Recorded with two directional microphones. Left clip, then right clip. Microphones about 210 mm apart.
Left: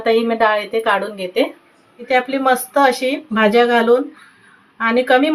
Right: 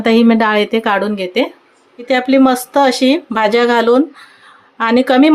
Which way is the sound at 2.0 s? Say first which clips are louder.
Right 4 dB; 55° right (ahead or behind).